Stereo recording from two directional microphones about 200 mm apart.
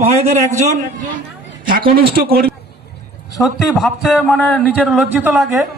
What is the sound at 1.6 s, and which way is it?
Speech, 50° right (ahead or behind).